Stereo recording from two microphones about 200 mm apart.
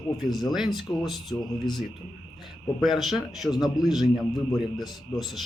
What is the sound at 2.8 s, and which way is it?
A man's voice, centre (ahead or behind).